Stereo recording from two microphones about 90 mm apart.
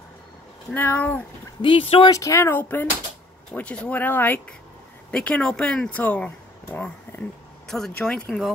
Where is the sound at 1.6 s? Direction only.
80° left.